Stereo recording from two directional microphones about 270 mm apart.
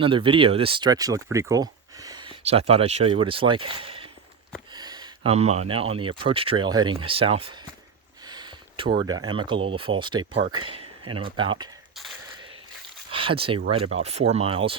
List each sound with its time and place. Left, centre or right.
0.0 s speech: centre
13.1 s speech: centre